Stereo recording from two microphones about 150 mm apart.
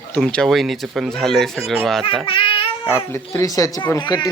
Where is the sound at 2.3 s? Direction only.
35° left (ahead or behind).